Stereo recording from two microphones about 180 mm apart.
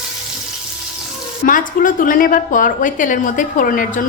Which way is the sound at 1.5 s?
50° left (ahead or behind).